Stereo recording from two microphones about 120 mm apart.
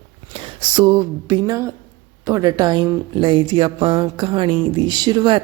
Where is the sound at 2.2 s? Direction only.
30° right (ahead or behind).